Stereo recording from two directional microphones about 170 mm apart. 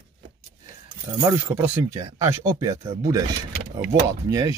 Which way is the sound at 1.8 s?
20° right (ahead or behind).